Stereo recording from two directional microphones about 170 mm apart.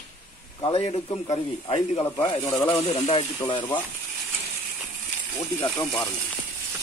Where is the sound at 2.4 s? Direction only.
15° left (ahead or behind).